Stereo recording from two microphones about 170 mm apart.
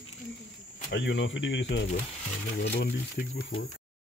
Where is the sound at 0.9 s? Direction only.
90° left.